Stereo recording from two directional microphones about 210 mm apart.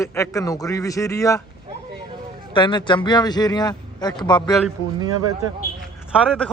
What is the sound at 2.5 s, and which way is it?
A man's voice, 20° left (ahead or behind).